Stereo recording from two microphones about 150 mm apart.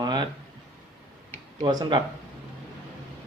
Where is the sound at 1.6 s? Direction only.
30° right (ahead or behind).